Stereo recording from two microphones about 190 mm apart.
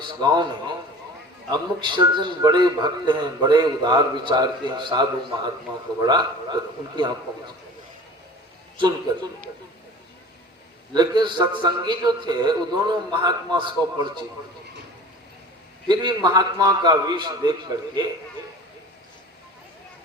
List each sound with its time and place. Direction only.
0.0 s a man's voice: 20° right (ahead or behind)
10.9 s a man's voice: 20° right (ahead or behind)
15.9 s a man's voice: 25° right (ahead or behind)